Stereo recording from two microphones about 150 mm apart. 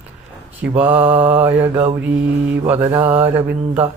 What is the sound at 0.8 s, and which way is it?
Speech, 10° right (ahead or behind).